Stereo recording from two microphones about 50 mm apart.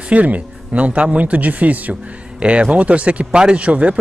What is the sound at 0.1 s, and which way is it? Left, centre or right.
Speech, right.